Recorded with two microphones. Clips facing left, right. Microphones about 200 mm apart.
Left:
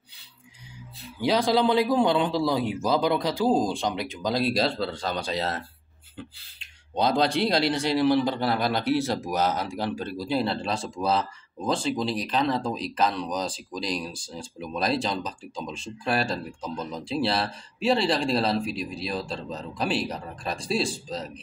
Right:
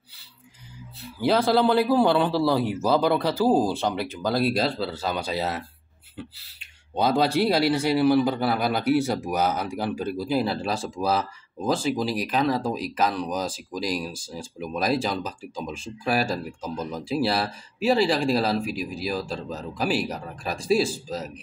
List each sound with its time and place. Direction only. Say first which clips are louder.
1.2 s speech: right 2 dB; 5° right (ahead or behind)